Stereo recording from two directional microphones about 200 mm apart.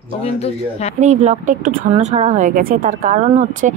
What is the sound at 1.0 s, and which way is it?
A woman's voice, 35° right (ahead or behind).